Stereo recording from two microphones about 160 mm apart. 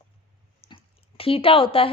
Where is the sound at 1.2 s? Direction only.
35° left (ahead or behind).